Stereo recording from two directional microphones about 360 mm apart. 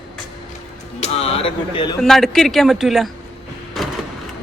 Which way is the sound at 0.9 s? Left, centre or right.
Centre.